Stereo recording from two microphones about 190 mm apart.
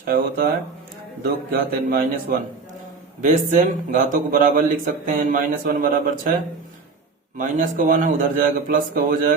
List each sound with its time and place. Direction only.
0.0 s speech: 50° right (ahead or behind)
7.3 s speech: 45° right (ahead or behind)